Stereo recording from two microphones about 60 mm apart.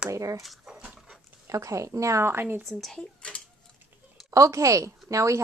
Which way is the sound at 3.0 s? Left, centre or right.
Centre.